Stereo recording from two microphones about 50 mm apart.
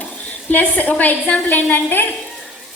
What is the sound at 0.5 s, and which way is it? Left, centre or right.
A woman's voice, left.